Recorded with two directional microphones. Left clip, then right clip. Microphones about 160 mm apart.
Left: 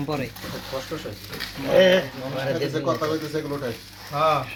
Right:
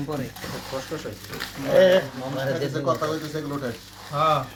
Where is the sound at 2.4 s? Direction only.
35° left (ahead or behind).